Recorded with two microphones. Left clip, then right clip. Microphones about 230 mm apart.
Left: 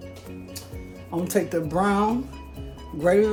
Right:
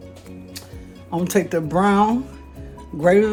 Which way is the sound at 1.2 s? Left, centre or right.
Right.